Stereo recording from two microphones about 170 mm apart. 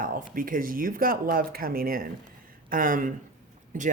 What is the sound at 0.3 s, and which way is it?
Speech, 55° right (ahead or behind).